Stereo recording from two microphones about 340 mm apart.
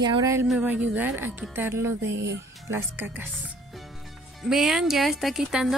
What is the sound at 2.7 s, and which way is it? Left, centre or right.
Speech, centre.